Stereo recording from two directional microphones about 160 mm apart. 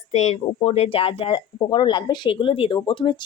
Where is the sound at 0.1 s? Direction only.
45° left (ahead or behind).